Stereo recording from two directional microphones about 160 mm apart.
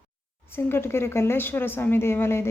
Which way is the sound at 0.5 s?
15° left (ahead or behind).